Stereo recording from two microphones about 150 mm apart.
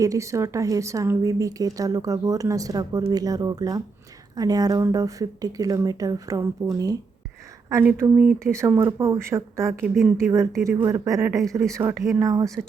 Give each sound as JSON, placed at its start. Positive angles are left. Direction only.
{"t": 0.0, "sound": "speech", "side_deg": -20}